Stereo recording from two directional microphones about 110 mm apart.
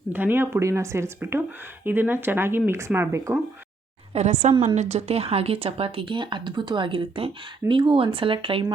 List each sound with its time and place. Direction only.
0.1 s speech: 20° right (ahead or behind)
4.1 s a woman's voice: 90° right; by 8.6 s 55° right (ahead or behind)